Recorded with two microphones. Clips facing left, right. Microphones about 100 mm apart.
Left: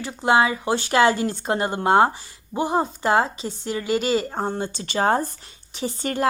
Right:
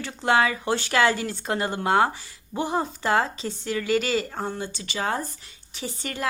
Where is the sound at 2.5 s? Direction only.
20° left (ahead or behind).